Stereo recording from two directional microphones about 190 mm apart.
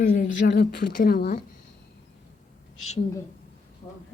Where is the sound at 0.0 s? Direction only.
50° left (ahead or behind).